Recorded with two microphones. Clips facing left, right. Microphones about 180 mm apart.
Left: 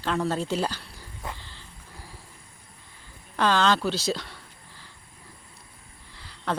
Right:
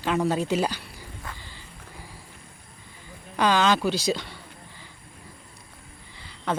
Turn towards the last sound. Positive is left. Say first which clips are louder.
# right 1 dB
turn(degrees=0)  # may be behind; listen again after turning